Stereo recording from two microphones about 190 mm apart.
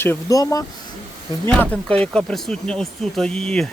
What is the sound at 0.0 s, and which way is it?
Speech, 15° left (ahead or behind).